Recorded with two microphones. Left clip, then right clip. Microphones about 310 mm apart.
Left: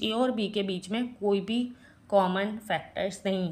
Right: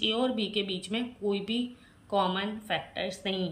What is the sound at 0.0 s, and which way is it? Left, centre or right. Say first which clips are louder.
A woman's voice: left 1 dB; centre.